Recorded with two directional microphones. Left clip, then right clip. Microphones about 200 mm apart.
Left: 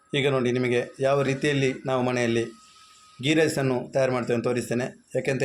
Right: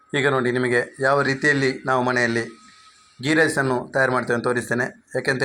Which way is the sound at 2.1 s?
35° right (ahead or behind).